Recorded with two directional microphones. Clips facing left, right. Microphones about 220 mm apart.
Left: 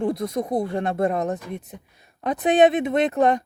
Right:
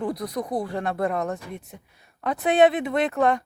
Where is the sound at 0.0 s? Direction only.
25° left (ahead or behind).